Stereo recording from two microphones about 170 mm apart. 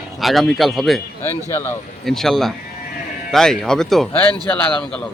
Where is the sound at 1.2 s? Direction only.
15° left (ahead or behind).